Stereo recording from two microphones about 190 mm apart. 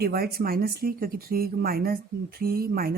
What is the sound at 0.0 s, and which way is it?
Speech, 55° right (ahead or behind).